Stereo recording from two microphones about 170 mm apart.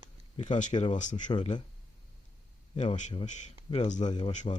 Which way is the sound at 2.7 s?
40° left (ahead or behind).